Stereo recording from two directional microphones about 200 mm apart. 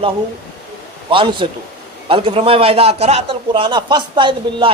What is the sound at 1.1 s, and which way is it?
Speech, 25° right (ahead or behind).